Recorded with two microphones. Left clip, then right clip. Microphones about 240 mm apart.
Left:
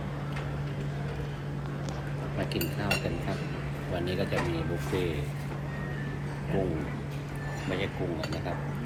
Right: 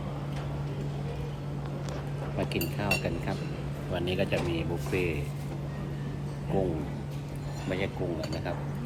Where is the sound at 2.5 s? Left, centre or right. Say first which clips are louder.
Even; centre.